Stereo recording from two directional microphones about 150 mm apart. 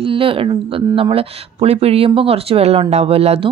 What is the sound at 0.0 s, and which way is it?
A woman's voice, 35° right (ahead or behind).